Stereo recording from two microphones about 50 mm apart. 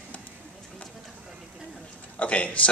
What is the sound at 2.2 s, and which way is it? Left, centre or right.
Speech, left.